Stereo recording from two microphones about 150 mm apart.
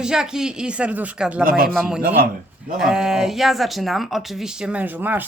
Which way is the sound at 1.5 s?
85° right.